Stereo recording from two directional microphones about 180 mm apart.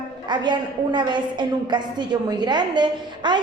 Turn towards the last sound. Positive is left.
turn(degrees=-25)  # may be behind; listen again after turning